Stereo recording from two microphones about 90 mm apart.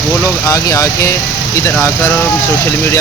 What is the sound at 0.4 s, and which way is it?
Speech, 35° left (ahead or behind).